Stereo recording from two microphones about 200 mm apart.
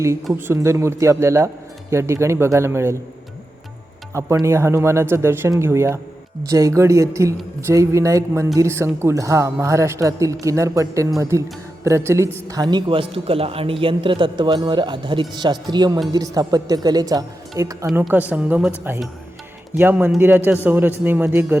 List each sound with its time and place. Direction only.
0.3 s speech: 10° right (ahead or behind)
4.1 s a man's voice: 15° right (ahead or behind)
17.8 s speech: 5° right (ahead or behind)
19.7 s speech: 10° right (ahead or behind)